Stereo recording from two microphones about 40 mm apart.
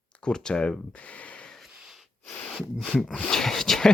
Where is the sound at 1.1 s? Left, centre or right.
Left.